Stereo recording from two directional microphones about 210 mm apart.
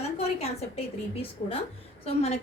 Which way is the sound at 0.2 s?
30° left (ahead or behind).